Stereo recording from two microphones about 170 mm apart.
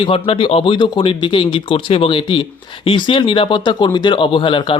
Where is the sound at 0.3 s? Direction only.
30° left (ahead or behind).